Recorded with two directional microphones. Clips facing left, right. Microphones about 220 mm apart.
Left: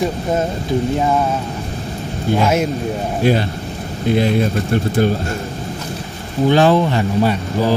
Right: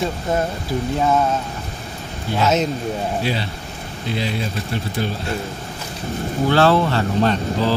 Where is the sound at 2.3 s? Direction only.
10° left (ahead or behind).